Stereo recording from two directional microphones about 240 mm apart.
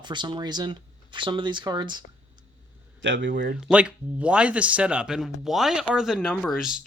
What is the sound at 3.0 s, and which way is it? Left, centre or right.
Speech, right.